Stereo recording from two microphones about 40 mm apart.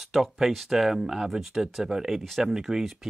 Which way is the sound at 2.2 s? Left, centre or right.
Centre.